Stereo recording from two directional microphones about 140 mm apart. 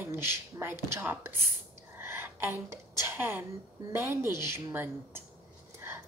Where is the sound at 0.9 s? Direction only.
15° right (ahead or behind).